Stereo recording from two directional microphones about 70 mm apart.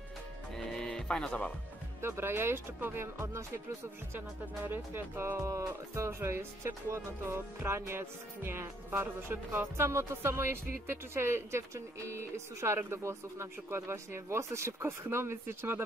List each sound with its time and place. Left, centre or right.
0.7 s music: centre
2.0 s speech: right
4.6 s speech: right
5.4 s speech: right